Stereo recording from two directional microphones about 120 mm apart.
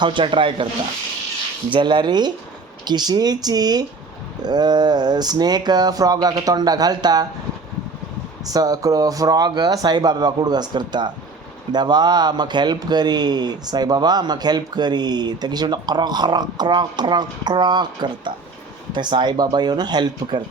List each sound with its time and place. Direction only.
0.0 s speech: 45° right (ahead or behind)
1.7 s speech: 40° right (ahead or behind)
8.5 s speech: 30° right (ahead or behind)